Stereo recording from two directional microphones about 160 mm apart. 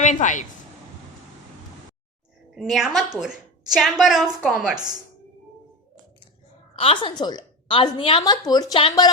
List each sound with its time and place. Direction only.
0.0 s a woman's voice: 50° left (ahead or behind)
2.6 s a woman's voice: 5° right (ahead or behind)
6.7 s a woman's voice: 35° left (ahead or behind)
8.7 s speech: 35° left (ahead or behind)